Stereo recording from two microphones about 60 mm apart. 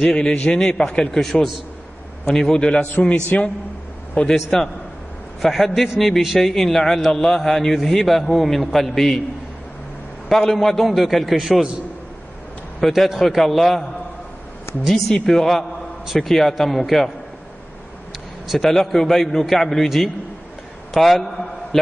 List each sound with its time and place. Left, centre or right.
0.0 s a man's voice: centre
4.3 s a man's voice: centre
10.2 s a man's voice: centre
12.8 s a man's voice: centre
14.7 s speech: left
15.0 s a man's voice: centre
18.5 s a man's voice: centre